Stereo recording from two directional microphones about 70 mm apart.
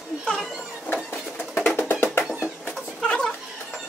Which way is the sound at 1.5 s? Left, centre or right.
Left.